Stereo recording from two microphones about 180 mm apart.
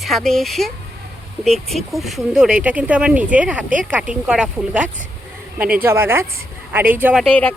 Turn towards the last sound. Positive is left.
turn(degrees=5)  # may be behind; listen again after turning